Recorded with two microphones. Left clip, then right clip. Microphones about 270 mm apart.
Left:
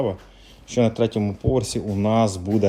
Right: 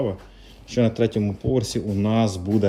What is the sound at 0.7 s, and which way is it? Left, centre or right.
Speech, centre.